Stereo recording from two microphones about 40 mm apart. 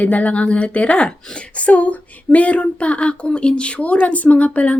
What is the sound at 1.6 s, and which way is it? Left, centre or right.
A woman's voice, left.